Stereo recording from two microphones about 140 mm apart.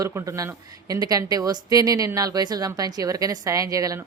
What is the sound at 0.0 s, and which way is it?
A woman's voice, 20° right (ahead or behind).